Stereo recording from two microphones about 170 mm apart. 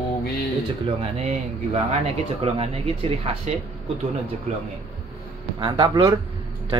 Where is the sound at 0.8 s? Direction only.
35° right (ahead or behind).